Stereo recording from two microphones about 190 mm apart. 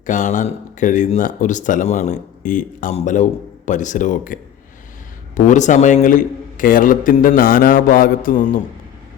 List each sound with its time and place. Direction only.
0.0 s a man's voice: 40° left (ahead or behind)